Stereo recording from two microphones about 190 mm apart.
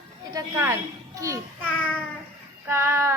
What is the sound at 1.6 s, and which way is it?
Child singing, 10° left (ahead or behind).